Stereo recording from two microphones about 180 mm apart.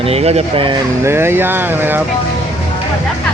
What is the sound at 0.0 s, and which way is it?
Speech, 35° right (ahead or behind).